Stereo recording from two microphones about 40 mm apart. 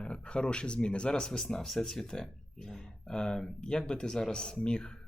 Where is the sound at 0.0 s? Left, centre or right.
Left.